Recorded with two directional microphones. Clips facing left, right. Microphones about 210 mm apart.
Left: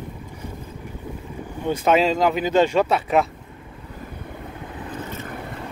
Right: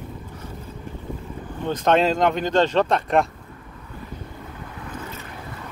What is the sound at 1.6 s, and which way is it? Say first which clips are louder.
Speech: left 1 dB; 10° left (ahead or behind).